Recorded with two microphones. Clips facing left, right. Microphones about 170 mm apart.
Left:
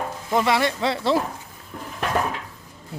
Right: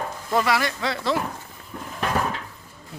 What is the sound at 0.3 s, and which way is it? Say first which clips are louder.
Speech: left 2 dB; 20° left (ahead or behind).